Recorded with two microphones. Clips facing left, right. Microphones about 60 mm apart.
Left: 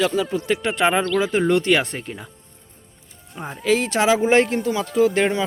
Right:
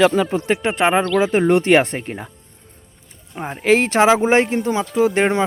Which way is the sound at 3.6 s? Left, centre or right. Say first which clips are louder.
Right 5 dB; right.